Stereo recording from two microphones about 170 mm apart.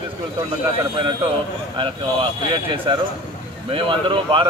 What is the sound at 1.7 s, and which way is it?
A man's voice, 30° right (ahead or behind).